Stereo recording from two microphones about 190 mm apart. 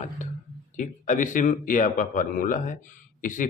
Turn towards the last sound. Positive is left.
turn(degrees=45)  # may be behind; listen again after turning